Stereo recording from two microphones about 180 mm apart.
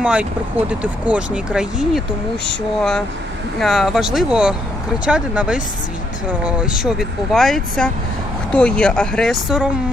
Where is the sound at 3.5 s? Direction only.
Centre (ahead or behind).